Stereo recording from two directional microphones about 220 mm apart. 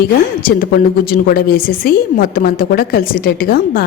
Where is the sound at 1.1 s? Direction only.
40° left (ahead or behind).